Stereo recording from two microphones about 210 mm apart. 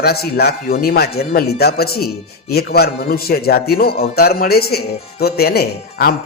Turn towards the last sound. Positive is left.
turn(degrees=45)  # may be behind; listen again after turning